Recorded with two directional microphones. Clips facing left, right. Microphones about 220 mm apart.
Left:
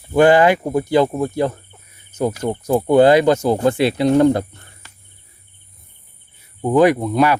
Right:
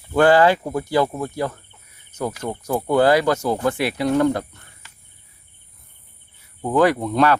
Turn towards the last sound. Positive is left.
turn(degrees=10)  # may be behind; listen again after turning